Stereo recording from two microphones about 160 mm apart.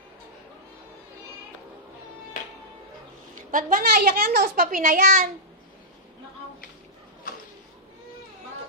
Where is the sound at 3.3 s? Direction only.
55° right (ahead or behind).